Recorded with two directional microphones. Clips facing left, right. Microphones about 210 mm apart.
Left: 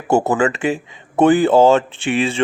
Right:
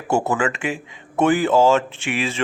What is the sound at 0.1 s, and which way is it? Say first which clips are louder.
Speech: left 5 dB; 35° left (ahead or behind).